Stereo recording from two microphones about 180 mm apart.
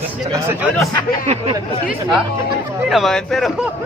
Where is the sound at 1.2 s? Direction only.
35° right (ahead or behind).